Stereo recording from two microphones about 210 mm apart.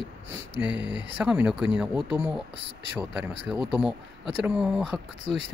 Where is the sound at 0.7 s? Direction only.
60° right (ahead or behind).